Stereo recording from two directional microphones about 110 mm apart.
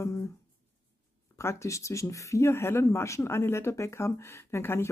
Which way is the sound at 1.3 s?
25° left (ahead or behind).